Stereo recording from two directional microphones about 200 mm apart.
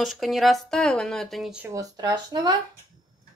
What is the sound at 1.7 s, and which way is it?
Speech, 15° right (ahead or behind).